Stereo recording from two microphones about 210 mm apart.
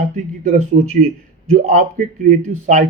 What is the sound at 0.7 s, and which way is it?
Speech, 45° right (ahead or behind).